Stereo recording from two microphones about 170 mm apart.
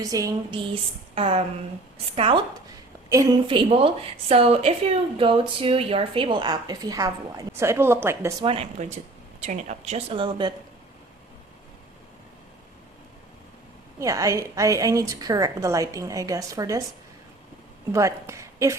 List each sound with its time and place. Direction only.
0.0 s a woman's voice: 20° right (ahead or behind)
0.7 s speech: 35° right (ahead or behind)
3.1 s a woman's voice: 20° right (ahead or behind)
3.4 s a woman's voice: 30° right (ahead or behind)
8.4 s speech: 35° right (ahead or behind)
14.0 s a woman's voice: 20° right (ahead or behind)
17.9 s a woman's voice: 15° right (ahead or behind)